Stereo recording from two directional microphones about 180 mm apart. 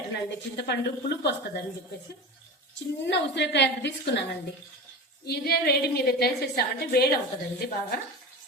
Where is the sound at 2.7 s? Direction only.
75° left (ahead or behind).